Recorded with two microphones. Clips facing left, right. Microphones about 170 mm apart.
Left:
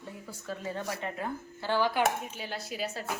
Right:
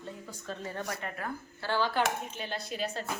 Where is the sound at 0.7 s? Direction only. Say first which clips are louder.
Left 4 dB; 20° left (ahead or behind).